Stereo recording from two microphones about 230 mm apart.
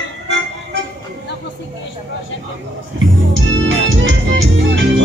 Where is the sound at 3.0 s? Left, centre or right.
Right.